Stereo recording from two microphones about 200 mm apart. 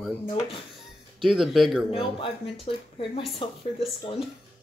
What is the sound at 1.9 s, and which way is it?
Speech, 25° left (ahead or behind).